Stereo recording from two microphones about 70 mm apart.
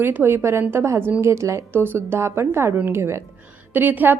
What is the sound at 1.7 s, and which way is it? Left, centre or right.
A woman's voice, right.